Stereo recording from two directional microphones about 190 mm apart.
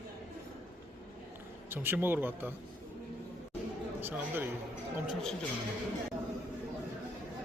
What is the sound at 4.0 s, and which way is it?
Speech, 10° right (ahead or behind).